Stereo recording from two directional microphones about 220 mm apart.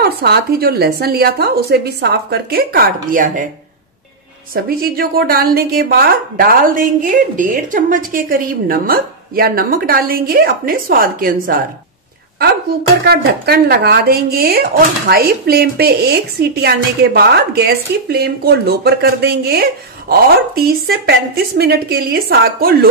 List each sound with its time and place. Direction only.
0.0 s speech: 45° right (ahead or behind)
4.6 s speech: 40° right (ahead or behind)
13.0 s speech: 45° right (ahead or behind)